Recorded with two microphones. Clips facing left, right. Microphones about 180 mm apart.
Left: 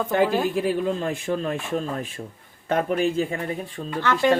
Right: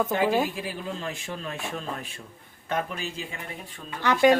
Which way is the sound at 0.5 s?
55° left (ahead or behind).